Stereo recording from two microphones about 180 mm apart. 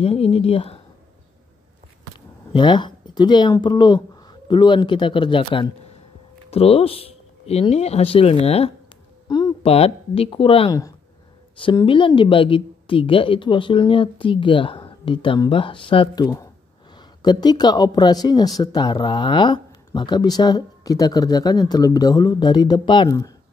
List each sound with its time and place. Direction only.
0.0 s speech: 35° left (ahead or behind)
2.5 s speech: 25° left (ahead or behind)